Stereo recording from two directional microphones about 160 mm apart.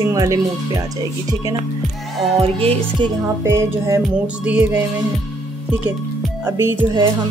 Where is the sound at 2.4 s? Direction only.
40° right (ahead or behind).